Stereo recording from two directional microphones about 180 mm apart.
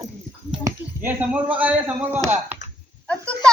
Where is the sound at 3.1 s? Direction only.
5° left (ahead or behind).